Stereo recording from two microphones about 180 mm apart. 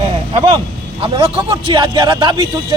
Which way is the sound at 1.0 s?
30° right (ahead or behind).